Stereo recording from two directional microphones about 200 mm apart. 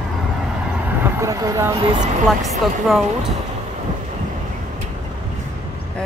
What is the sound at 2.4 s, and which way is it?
Speech, centre (ahead or behind).